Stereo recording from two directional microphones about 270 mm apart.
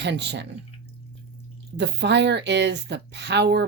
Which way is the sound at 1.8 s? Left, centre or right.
Right.